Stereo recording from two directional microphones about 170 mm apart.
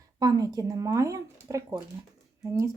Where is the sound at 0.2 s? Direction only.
20° right (ahead or behind).